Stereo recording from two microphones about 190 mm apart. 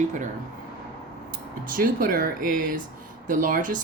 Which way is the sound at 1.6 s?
50° right (ahead or behind).